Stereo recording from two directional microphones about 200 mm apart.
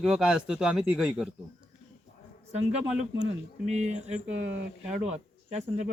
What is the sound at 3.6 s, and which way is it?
Speech, 35° right (ahead or behind).